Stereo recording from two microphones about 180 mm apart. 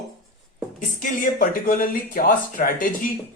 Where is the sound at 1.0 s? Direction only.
50° left (ahead or behind).